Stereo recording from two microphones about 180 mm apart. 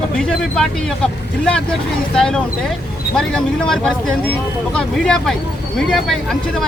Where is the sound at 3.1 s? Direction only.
5° left (ahead or behind).